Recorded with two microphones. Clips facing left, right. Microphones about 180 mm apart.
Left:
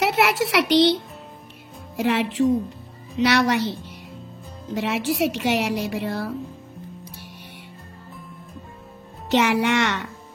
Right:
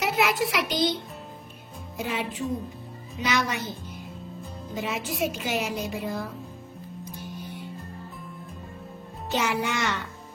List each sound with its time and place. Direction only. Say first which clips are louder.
0.0 s a sound: left 4 dB; 75° left (ahead or behind)
2.0 s a woman's voice: left 9 dB; 80° left
4.7 s a woman's voice: left 7 dB; 80° left
7.1 s music: right 4 dB; 80° left
9.3 s speech: left 7 dB; 80° left